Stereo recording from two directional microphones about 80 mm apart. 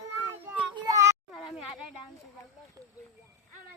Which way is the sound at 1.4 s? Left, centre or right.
Centre.